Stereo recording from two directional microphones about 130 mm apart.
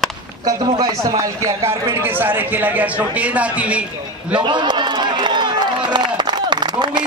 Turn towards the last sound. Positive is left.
turn(degrees=-35)  # may be behind; listen again after turning